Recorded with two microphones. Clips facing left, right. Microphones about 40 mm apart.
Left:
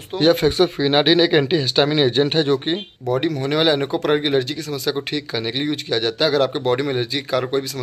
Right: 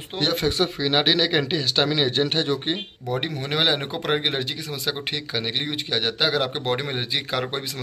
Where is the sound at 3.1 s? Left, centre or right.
Centre.